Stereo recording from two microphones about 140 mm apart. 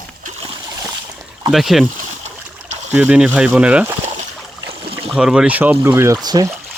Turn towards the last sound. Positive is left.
turn(degrees=-30)  # may be behind; listen again after turning